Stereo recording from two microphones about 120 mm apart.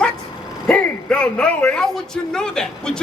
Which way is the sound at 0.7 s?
10° left (ahead or behind).